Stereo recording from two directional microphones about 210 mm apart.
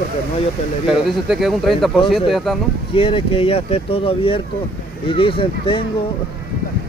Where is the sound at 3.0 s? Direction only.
25° left (ahead or behind).